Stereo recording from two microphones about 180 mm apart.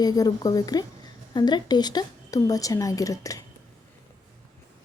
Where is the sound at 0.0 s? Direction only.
20° left (ahead or behind).